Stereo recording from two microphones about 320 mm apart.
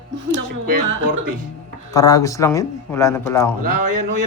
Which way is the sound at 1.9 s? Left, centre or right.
Centre.